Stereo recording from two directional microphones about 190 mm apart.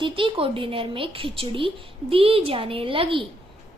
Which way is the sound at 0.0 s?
25° right (ahead or behind).